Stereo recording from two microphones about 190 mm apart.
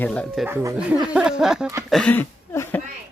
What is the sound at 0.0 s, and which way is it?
Speech, 5° left (ahead or behind).